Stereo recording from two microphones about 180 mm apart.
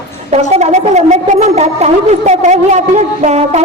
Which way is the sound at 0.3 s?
35° right (ahead or behind).